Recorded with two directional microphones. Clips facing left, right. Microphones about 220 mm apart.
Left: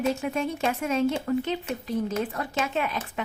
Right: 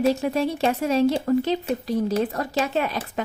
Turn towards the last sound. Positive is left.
turn(degrees=-35)  # may be behind; listen again after turning